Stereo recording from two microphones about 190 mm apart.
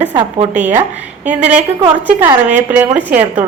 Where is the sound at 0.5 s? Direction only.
10° right (ahead or behind).